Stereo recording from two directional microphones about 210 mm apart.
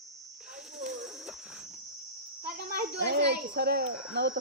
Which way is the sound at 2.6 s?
55° right (ahead or behind).